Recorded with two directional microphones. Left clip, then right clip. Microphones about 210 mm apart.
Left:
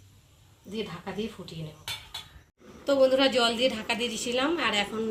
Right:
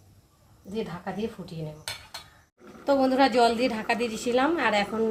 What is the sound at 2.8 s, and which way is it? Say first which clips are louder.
A woman's voice: even; 50° right (ahead or behind).